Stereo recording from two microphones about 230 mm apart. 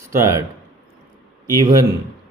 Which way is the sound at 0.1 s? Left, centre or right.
Centre.